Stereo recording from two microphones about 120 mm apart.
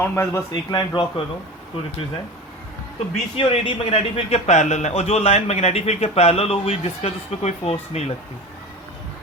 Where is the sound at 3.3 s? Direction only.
50° left (ahead or behind).